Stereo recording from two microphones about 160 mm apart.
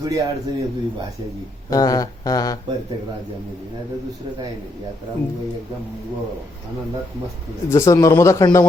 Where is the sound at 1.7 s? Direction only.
20° left (ahead or behind).